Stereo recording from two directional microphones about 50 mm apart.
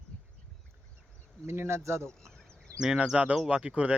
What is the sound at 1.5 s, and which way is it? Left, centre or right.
Speech, right.